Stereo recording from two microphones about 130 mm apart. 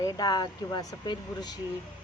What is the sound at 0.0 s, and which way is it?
A man's voice, 30° left (ahead or behind).